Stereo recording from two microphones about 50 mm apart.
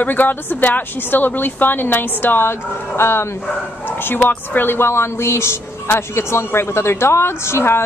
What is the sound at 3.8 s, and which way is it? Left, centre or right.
A woman's voice, left.